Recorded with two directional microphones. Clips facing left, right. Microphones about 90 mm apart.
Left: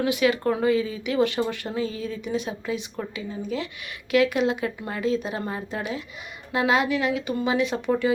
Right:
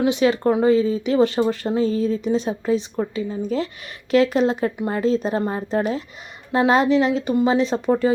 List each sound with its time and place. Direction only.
0.0 s speech: 25° right (ahead or behind)